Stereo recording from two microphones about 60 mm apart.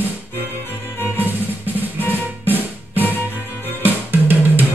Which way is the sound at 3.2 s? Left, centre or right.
Right.